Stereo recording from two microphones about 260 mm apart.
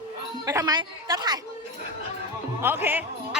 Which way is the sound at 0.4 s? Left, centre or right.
Centre.